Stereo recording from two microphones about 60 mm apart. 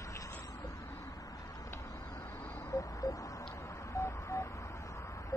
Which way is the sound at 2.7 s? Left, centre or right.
Left.